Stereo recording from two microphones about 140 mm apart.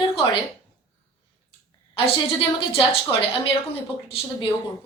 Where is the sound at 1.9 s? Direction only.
40° left (ahead or behind).